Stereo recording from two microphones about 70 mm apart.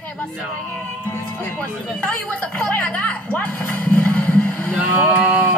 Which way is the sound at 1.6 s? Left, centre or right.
Left.